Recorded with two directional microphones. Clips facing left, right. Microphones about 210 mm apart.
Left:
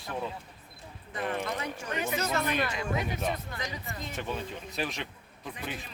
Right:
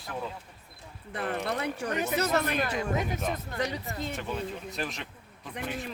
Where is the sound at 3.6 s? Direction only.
65° right (ahead or behind).